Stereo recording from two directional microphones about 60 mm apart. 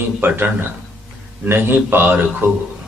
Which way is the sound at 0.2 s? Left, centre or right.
Right.